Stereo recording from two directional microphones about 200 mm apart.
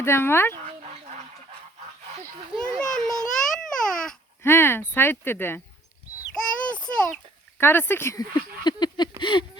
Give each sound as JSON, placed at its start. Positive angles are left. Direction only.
{"t": 0.0, "sound": "speech", "side_deg": 10}
{"t": 0.6, "sound": "dog", "side_deg": -35}
{"t": 2.7, "sound": "babbling", "side_deg": 5}
{"t": 6.3, "sound": "a sound", "side_deg": 5}
{"t": 7.6, "sound": "speech", "side_deg": 10}
{"t": 8.6, "sound": "a sound", "side_deg": 20}